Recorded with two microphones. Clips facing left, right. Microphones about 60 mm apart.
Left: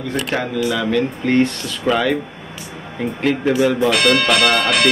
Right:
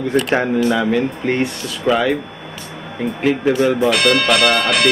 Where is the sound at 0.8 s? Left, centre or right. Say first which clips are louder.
Right 1 dB; centre.